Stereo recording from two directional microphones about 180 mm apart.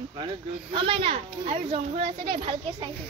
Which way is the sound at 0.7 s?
30° right (ahead or behind).